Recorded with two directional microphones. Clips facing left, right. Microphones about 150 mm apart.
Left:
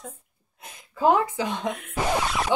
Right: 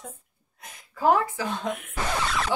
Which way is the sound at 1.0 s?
20° left (ahead or behind).